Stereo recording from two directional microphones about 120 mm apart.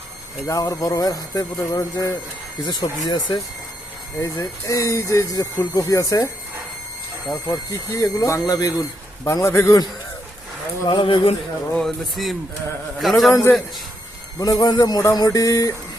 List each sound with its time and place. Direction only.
0.4 s speech: 30° left (ahead or behind)
4.2 s speech: 25° left (ahead or behind)
7.4 s speech: 25° left (ahead or behind)
10.8 s speech: 45° left (ahead or behind)
11.7 s speech: 5° left (ahead or behind)
14.3 s speech: 30° left (ahead or behind)